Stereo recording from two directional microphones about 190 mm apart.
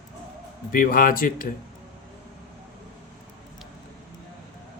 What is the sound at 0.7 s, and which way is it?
Speech, 45° left (ahead or behind).